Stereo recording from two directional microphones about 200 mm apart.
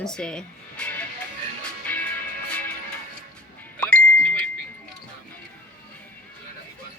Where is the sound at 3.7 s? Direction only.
5° left (ahead or behind).